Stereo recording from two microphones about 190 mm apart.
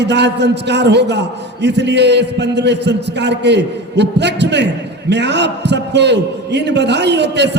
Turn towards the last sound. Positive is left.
turn(degrees=-65)  # may be behind; listen again after turning